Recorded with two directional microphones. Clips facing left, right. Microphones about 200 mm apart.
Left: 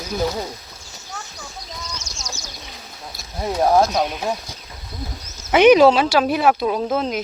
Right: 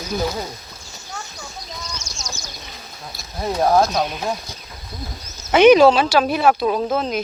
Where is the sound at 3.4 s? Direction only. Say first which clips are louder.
Even; 10° left (ahead or behind).